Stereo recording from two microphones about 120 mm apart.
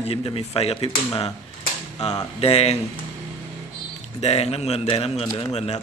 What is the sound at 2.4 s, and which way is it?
Speech, 60° left (ahead or behind).